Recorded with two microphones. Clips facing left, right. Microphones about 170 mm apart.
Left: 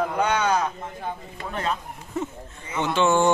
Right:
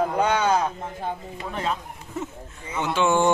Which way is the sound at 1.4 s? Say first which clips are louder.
Left 1 dB; 10° right (ahead or behind).